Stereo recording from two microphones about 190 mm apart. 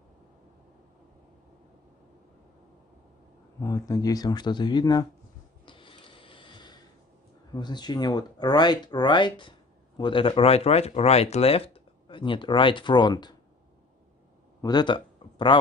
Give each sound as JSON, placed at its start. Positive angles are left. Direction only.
{"t": 3.6, "sound": "speech", "side_deg": 20}
{"t": 5.7, "sound": "a sound", "side_deg": 25}
{"t": 7.5, "sound": "speech", "side_deg": 20}
{"t": 14.6, "sound": "speech", "side_deg": 20}